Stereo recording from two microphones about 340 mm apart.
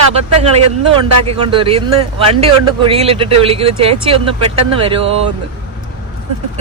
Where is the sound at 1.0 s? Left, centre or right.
Centre.